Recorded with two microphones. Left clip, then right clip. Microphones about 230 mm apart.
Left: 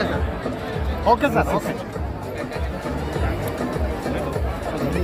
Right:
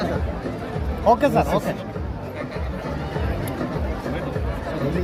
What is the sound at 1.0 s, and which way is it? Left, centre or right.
Speech, right.